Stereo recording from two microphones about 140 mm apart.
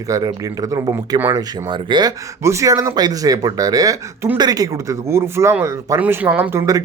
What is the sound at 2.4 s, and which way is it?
Speech, 20° right (ahead or behind).